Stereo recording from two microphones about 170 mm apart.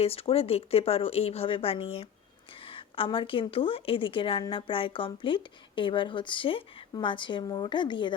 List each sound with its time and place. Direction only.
0.0 s a woman's voice: 35° left (ahead or behind)